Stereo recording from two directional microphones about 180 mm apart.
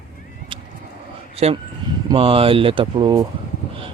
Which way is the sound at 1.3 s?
35° right (ahead or behind).